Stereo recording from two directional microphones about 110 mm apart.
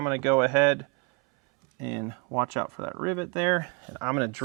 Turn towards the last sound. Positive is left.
turn(degrees=-15)  # may be behind; listen again after turning